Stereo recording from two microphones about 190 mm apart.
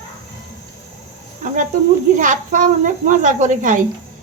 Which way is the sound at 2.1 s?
40° right (ahead or behind).